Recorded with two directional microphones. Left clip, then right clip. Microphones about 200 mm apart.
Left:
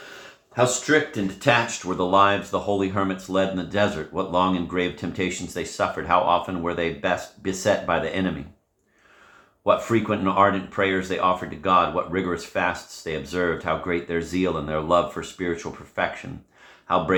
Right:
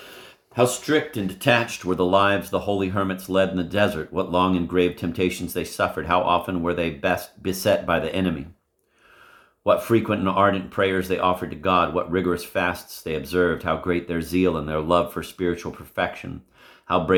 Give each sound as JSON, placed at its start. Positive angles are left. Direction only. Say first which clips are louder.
{"t": 0.5, "sound": "speech", "louder": "left 1 dB", "side_deg": -45}
{"t": 9.9, "sound": "speech", "louder": "right 1 dB", "side_deg": -35}
{"t": 16.8, "sound": "speech", "louder": "right 1 dB", "side_deg": -40}